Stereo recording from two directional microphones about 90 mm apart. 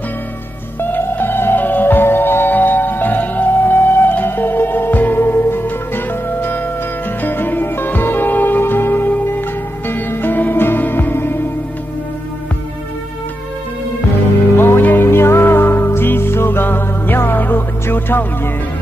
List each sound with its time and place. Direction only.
0.7 s music: 25° left (ahead or behind)
7.2 s music: 20° left (ahead or behind)
14.6 s music: 20° left (ahead or behind)